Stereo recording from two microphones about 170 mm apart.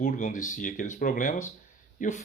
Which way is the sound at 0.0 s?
50° left (ahead or behind).